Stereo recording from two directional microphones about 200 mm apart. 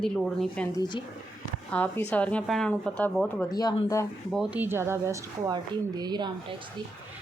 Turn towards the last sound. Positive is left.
turn(degrees=-20)  # may be behind; listen again after turning